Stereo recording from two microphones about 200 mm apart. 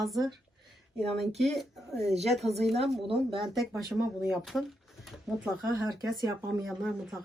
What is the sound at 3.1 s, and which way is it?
Speech, 25° right (ahead or behind).